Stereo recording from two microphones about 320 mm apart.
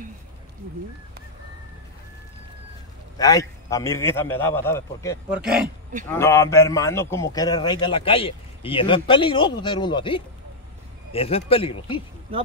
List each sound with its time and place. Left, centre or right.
3.2 s a man's voice: centre
5.3 s a man's voice: centre